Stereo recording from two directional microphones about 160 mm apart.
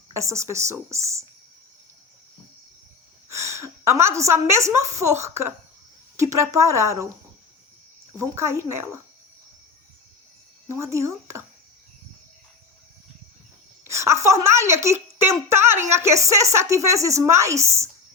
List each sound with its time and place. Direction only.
0.1 s speech: 20° right (ahead or behind)
3.2 s a woman's voice: 20° right (ahead or behind)
8.1 s speech: 15° right (ahead or behind)
10.9 s speech: 20° right (ahead or behind)
13.9 s speech: 15° right (ahead or behind)